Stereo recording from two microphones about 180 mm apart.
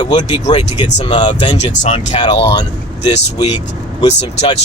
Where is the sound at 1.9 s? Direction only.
25° left (ahead or behind).